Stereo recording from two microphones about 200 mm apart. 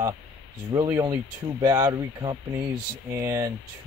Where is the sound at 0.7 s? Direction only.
15° right (ahead or behind).